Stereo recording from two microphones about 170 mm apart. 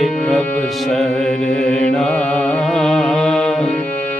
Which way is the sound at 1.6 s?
5° left (ahead or behind).